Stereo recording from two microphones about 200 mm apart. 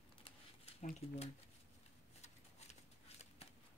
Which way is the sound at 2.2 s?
35° left (ahead or behind).